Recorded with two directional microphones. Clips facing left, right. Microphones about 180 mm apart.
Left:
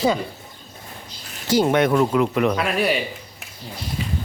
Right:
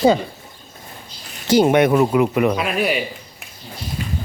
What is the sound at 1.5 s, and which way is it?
Speech, 15° right (ahead or behind).